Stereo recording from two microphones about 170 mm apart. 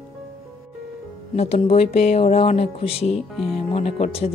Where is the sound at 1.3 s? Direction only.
35° left (ahead or behind).